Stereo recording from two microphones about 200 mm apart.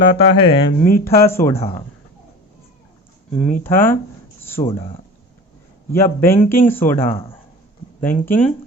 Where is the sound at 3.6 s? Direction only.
10° left (ahead or behind).